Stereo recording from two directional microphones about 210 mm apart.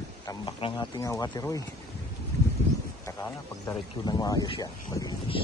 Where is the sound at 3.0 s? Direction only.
15° left (ahead or behind).